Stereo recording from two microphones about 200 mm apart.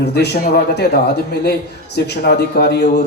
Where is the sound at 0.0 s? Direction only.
55° left (ahead or behind).